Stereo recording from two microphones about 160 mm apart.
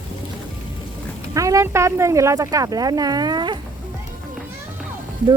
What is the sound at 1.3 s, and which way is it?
Speech, 20° right (ahead or behind).